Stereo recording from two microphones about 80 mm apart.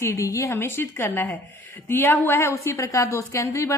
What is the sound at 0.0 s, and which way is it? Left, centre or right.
Speech, left.